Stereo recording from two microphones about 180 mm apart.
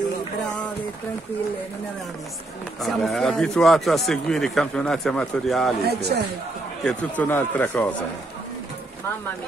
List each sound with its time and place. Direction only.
2.8 s speech: centre (ahead or behind)
5.9 s speech: 65° right (ahead or behind)
6.8 s speech: 5° left (ahead or behind)